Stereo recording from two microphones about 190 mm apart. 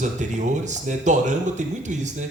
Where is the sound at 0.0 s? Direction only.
40° right (ahead or behind).